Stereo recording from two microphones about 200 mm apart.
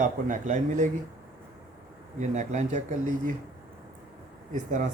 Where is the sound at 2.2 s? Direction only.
35° right (ahead or behind).